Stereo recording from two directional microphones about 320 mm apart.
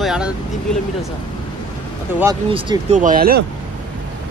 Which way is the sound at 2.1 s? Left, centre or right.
Centre.